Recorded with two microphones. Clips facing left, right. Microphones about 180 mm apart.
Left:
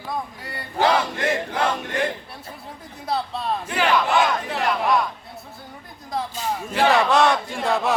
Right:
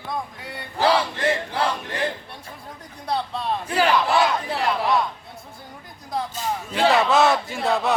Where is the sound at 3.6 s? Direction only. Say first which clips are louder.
Right 1 dB; 35° right (ahead or behind).